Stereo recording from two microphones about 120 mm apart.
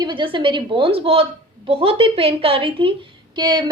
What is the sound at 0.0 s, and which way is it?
A woman's voice, 45° right (ahead or behind).